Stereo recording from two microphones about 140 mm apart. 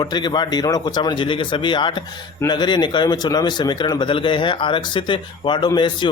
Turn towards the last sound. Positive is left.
turn(degrees=35)  # may be behind; listen again after turning